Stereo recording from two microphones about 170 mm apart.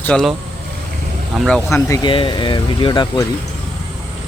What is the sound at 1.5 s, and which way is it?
Speech, 5° left (ahead or behind).